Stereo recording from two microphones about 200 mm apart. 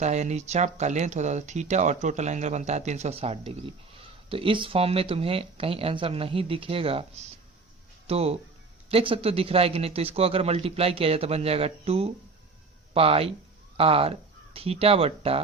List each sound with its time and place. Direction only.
0.0 s speech: 35° right (ahead or behind)
8.0 s speech: 30° right (ahead or behind)